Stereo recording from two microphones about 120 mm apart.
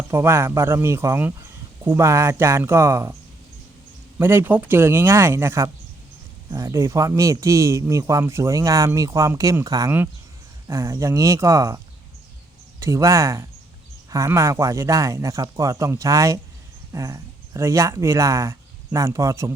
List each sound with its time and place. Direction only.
0.1 s speech: 20° right (ahead or behind)
4.2 s speech: 20° right (ahead or behind)
12.8 s speech: 25° right (ahead or behind)